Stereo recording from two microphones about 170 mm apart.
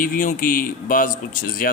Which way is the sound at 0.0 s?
50° left (ahead or behind).